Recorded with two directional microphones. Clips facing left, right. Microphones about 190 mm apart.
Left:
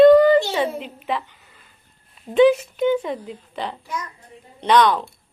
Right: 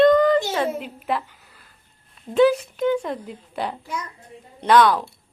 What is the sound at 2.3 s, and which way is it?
A child's voice, centre (ahead or behind).